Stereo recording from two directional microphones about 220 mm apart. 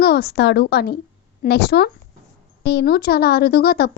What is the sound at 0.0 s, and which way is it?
A woman's voice, 45° left (ahead or behind).